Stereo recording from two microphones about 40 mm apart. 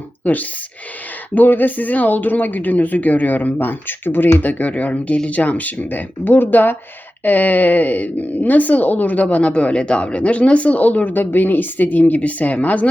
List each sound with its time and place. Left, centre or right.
0.3 s speech: left
4.5 s speech: left
5.4 s speech: left
9.2 s speech: left